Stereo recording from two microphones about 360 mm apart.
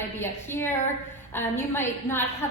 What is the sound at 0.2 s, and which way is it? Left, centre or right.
A woman's voice, centre.